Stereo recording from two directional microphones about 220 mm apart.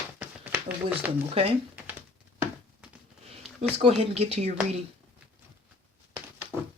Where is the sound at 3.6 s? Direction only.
30° right (ahead or behind).